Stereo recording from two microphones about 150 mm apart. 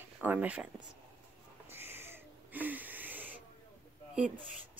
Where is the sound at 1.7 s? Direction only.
15° right (ahead or behind).